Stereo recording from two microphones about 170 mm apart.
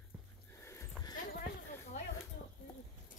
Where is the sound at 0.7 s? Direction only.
15° left (ahead or behind).